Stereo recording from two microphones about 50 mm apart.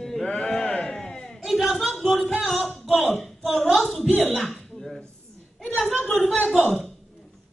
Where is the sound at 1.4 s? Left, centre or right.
Centre.